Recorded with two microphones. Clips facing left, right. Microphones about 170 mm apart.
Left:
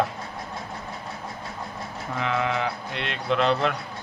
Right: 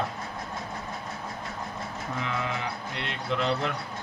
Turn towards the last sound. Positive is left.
turn(degrees=70)  # may be behind; listen again after turning